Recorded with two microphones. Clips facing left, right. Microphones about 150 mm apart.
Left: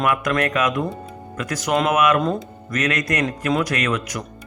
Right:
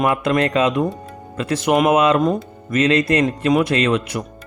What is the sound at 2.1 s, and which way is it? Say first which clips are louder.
Speech: right 3 dB; 15° right (ahead or behind).